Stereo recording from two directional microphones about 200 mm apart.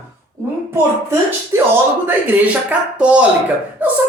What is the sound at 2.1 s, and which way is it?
Speech, 5° right (ahead or behind).